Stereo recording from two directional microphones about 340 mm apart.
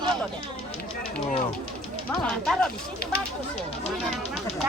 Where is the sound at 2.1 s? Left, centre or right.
Centre.